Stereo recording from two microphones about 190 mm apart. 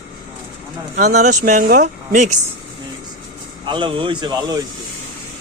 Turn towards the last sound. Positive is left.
turn(degrees=-20)  # may be behind; listen again after turning